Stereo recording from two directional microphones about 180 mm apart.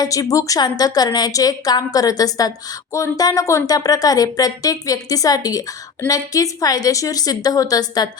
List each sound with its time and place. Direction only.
0.0 s speech: 20° left (ahead or behind)